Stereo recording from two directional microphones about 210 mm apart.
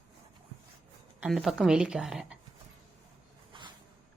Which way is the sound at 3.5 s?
25° right (ahead or behind).